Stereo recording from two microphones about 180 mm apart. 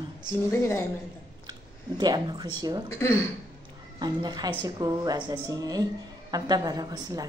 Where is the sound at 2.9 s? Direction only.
15° left (ahead or behind).